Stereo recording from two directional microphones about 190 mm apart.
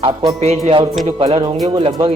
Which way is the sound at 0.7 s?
30° right (ahead or behind).